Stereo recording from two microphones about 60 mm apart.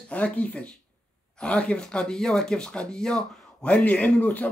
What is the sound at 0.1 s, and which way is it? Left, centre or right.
Speech, left.